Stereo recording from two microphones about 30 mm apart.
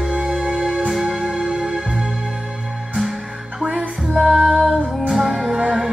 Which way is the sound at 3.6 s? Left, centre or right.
Centre.